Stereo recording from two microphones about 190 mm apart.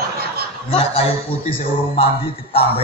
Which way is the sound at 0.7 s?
30° left (ahead or behind).